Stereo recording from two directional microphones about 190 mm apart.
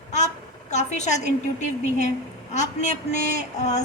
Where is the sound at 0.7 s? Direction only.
40° left (ahead or behind).